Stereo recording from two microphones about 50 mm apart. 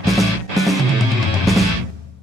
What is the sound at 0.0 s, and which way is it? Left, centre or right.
Music, centre.